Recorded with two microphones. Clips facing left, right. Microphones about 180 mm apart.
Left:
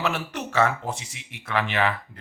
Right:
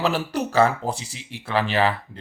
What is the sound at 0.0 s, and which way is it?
Speech, 35° right (ahead or behind).